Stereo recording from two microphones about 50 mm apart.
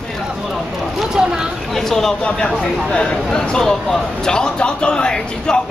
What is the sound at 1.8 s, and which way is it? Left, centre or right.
Speech, centre.